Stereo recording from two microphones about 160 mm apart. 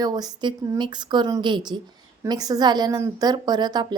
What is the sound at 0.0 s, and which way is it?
A woman's voice, 25° right (ahead or behind).